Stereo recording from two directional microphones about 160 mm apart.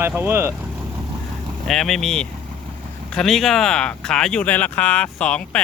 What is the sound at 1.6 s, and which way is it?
Speech, centre (ahead or behind).